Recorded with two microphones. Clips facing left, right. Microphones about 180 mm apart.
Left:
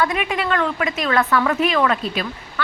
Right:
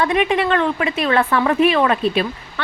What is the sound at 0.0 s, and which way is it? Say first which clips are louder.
A woman's voice: right 4 dB; 30° right (ahead or behind).